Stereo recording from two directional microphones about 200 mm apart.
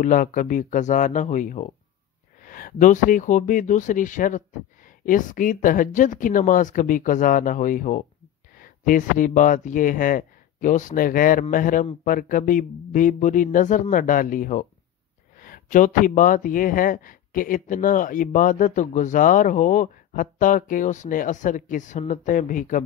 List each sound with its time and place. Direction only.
0.0 s speech: 40° left (ahead or behind)